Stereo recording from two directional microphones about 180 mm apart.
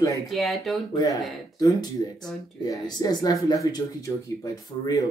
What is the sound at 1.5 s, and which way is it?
Speech, 20° left (ahead or behind).